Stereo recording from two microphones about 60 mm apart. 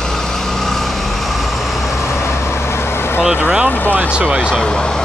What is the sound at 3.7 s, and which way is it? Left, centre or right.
Speech, left.